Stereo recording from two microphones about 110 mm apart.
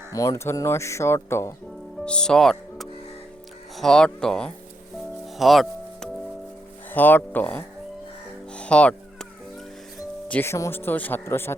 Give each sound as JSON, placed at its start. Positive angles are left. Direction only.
{"t": 0.1, "sound": "speech", "side_deg": 30}
{"t": 2.0, "sound": "speech", "side_deg": 5}
{"t": 5.4, "sound": "music", "side_deg": 0}
{"t": 6.9, "sound": "speech", "side_deg": 15}
{"t": 8.5, "sound": "music", "side_deg": 10}
{"t": 10.2, "sound": "speech", "side_deg": 15}